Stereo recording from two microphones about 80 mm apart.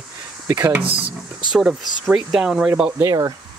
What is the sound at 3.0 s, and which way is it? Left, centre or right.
Speech, right.